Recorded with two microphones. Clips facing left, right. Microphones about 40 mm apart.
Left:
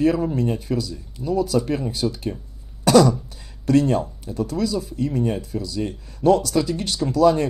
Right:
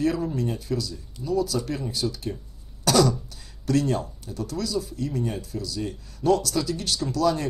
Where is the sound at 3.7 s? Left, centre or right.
Left.